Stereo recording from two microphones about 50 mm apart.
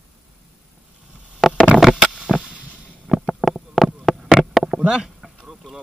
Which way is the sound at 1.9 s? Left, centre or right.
Centre.